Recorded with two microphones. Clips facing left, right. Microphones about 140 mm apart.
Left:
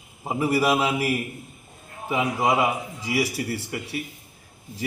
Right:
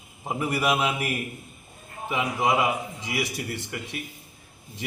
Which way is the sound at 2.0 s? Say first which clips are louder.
Left 2 dB; 5° left (ahead or behind).